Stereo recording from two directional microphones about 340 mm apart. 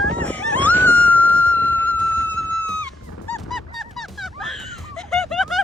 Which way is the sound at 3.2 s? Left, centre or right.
Centre.